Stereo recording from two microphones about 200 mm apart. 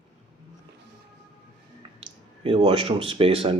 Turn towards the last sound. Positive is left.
turn(degrees=-30)  # may be behind; listen again after turning